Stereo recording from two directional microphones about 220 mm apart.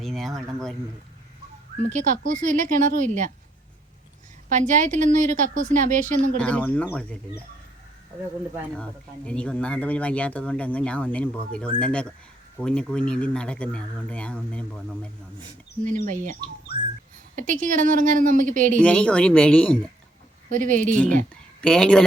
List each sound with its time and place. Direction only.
0.0 s speech: centre (ahead or behind)
1.8 s a woman's voice: 35° right (ahead or behind)
4.4 s a woman's voice: 35° right (ahead or behind)
6.3 s speech: 5° left (ahead or behind)
8.8 s speech: 5° left (ahead or behind)
15.8 s a woman's voice: 35° right (ahead or behind)
17.3 s a woman's voice: 35° right (ahead or behind)
18.8 s speech: 5° left (ahead or behind)
20.5 s a woman's voice: 35° right (ahead or behind)
21.6 s speech: 5° left (ahead or behind)